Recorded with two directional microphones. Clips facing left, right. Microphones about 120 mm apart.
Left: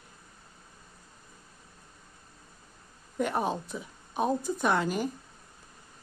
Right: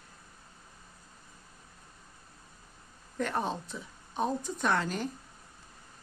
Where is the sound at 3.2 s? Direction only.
10° left (ahead or behind).